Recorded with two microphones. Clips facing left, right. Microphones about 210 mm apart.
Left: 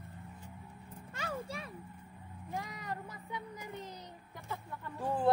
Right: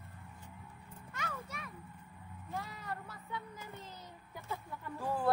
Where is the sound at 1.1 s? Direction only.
30° left (ahead or behind).